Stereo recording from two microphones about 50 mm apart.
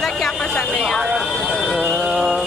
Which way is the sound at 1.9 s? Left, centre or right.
Centre.